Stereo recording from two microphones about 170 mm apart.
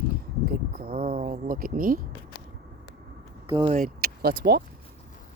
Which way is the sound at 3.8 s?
60° right (ahead or behind).